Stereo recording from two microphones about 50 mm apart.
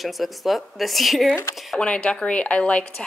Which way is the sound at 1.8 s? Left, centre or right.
Left.